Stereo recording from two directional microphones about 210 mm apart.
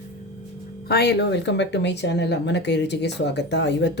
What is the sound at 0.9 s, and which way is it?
Speech, 50° left (ahead or behind).